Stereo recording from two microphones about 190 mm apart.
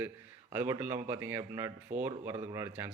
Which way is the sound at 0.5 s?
15° right (ahead or behind).